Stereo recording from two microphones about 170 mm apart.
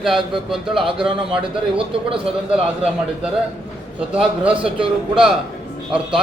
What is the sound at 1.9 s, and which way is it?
Speech, 30° right (ahead or behind).